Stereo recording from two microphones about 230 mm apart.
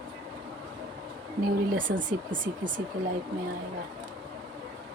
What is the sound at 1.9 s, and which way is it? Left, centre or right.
Speech, right.